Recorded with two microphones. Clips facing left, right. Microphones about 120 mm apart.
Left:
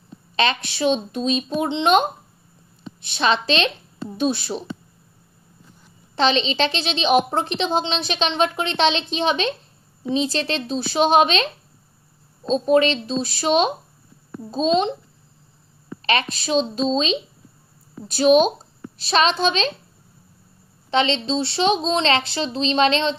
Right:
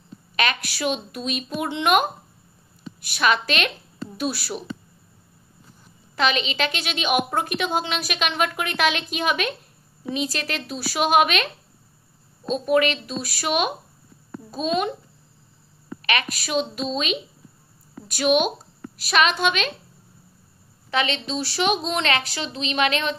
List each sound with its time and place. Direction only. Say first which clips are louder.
0.4 s a woman's voice: left 4 dB; 25° left (ahead or behind)
6.1 s a woman's voice: left 4 dB; 30° left (ahead or behind)
16.0 s a woman's voice: left 4 dB; 30° left (ahead or behind)
20.9 s a woman's voice: left 5 dB; 30° left (ahead or behind)